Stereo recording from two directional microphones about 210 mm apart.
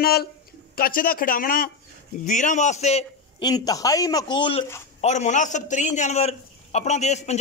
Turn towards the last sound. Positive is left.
turn(degrees=30)  # may be behind; listen again after turning